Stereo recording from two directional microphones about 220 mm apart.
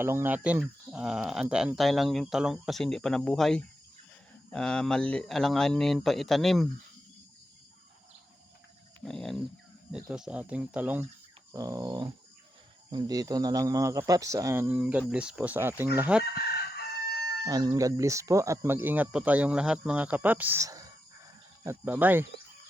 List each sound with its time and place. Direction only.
0.0 s speech: 10° right (ahead or behind)
9.0 s speech: centre (ahead or behind)
16.3 s chicken: 45° left (ahead or behind)
17.4 s speech: 15° right (ahead or behind)